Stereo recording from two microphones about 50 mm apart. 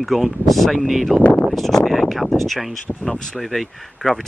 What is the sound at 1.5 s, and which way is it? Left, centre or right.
Speech, centre.